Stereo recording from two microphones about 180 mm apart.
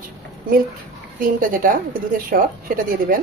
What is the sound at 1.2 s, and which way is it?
A woman's voice, 50° right (ahead or behind).